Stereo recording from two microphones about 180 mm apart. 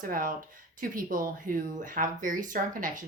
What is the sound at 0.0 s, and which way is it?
Speech, 50° right (ahead or behind).